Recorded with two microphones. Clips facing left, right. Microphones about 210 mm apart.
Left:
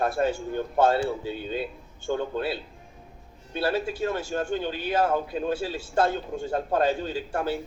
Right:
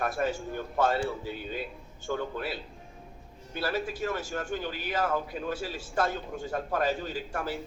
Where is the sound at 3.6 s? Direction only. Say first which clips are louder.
Left 5 dB; 30° left (ahead or behind).